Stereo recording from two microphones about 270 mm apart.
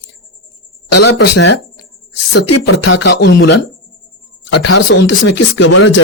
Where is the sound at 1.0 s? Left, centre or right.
Left.